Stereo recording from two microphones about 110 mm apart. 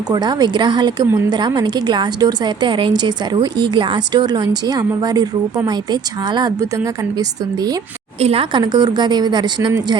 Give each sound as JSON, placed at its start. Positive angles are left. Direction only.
{"t": 0.1, "sound": "a woman's voice", "side_deg": -40}
{"t": 6.6, "sound": "a woman's voice", "side_deg": -25}
{"t": 8.2, "sound": "a woman's voice", "side_deg": -60}
{"t": 8.5, "sound": "a woman's voice", "side_deg": -40}